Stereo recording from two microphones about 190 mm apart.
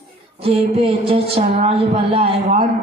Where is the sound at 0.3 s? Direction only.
30° right (ahead or behind).